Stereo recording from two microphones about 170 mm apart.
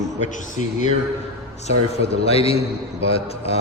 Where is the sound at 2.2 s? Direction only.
35° left (ahead or behind).